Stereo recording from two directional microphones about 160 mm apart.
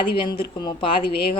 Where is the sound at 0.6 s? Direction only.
25° left (ahead or behind).